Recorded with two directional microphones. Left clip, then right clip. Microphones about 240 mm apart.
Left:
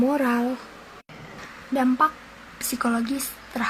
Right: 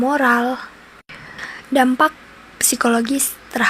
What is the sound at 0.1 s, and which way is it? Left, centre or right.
Speech, right.